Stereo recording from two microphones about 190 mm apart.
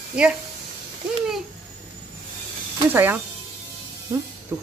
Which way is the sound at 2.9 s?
10° right (ahead or behind).